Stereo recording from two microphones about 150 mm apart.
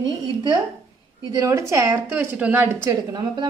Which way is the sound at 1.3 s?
20° right (ahead or behind).